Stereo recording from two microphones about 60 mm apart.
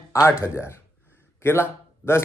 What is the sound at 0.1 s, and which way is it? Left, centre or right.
Speech, left.